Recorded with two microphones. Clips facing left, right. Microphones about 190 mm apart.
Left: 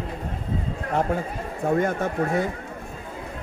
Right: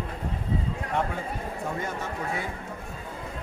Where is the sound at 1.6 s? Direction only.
55° left (ahead or behind).